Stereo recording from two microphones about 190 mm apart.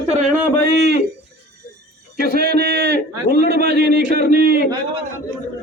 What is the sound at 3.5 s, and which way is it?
A man's voice, 60° right (ahead or behind).